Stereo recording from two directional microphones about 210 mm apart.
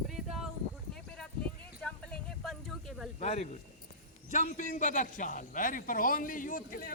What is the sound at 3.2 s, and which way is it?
A man's voice, 30° left (ahead or behind).